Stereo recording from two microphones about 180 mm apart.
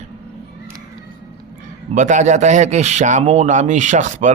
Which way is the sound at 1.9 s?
45° right (ahead or behind).